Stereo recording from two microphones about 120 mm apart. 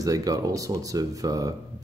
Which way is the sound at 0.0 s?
30° right (ahead or behind).